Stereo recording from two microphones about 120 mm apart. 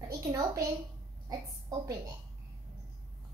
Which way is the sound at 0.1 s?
35° right (ahead or behind).